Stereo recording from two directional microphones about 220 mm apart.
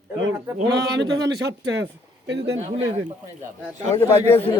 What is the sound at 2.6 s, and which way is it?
Speech, 30° right (ahead or behind).